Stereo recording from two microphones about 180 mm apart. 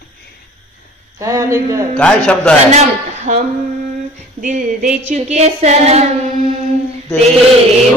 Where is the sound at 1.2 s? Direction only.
15° right (ahead or behind).